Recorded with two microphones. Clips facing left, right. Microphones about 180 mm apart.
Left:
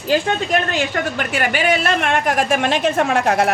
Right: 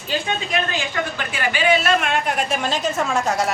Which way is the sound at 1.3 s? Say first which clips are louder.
Even; 60° left (ahead or behind).